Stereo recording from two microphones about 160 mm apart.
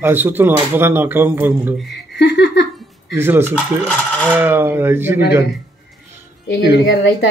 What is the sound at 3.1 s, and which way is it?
A man's voice, 15° right (ahead or behind).